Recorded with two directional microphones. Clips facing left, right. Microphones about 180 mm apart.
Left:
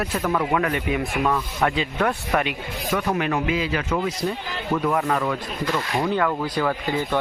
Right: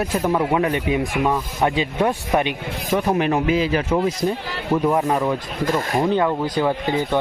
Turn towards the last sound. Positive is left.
turn(degrees=-20)  # may be behind; listen again after turning